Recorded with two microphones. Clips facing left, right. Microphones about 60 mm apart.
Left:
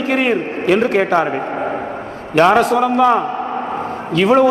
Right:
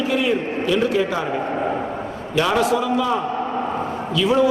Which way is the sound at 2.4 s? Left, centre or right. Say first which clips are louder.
Left 7 dB; left.